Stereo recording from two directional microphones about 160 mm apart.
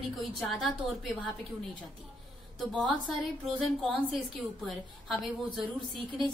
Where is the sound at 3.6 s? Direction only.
Centre (ahead or behind).